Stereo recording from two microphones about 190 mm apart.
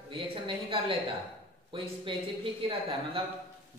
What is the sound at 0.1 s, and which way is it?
Speech, 30° right (ahead or behind).